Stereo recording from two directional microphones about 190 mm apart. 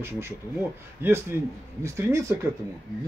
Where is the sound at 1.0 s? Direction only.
15° right (ahead or behind).